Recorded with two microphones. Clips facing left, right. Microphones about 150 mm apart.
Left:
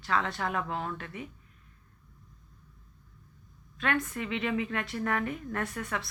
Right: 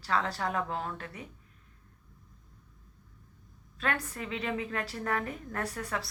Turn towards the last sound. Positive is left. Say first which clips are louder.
# left 1 dB
turn(degrees=-35)  # may be behind; listen again after turning